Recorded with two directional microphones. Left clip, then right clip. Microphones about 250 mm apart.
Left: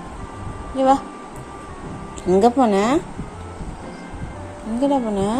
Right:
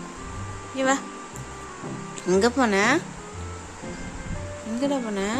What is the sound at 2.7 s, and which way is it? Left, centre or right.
Speech, centre.